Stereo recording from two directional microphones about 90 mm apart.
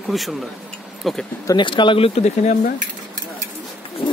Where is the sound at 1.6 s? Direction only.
65° left (ahead or behind).